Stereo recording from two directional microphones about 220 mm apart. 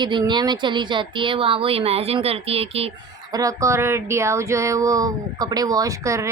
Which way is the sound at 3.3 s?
15° right (ahead or behind).